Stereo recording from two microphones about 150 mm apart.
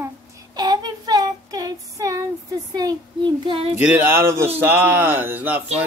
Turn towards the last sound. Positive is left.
turn(degrees=-10)  # may be behind; listen again after turning